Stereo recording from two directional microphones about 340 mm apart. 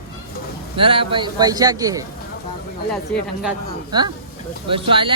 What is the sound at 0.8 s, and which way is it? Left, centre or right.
A man's voice, centre.